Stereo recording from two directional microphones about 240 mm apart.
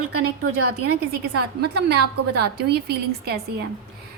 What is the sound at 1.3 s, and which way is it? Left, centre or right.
A woman's voice, right.